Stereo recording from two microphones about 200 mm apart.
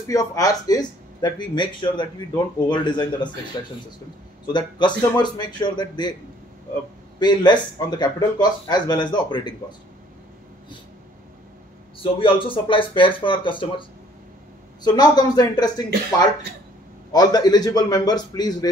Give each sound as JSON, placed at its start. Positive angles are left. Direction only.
{"t": 0.1, "sound": "speech", "side_deg": 15}
{"t": 7.2, "sound": "speech", "side_deg": 20}
{"t": 12.0, "sound": "speech", "side_deg": 25}
{"t": 17.1, "sound": "speech", "side_deg": 20}